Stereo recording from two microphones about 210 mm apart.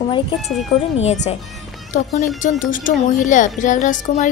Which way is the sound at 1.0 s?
30° left (ahead or behind).